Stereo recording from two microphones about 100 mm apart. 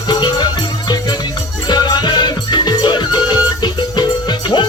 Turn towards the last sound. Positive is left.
turn(degrees=45)  # may be behind; listen again after turning